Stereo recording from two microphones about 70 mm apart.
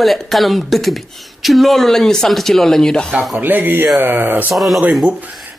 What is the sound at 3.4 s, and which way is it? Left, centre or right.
Speech, right.